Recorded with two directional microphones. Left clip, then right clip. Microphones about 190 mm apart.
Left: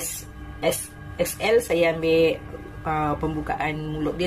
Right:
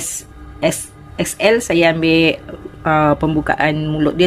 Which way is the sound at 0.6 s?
55° right (ahead or behind).